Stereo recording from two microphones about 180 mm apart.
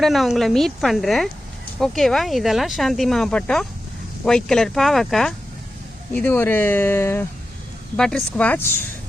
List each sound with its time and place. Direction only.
0.0 s speech: centre (ahead or behind)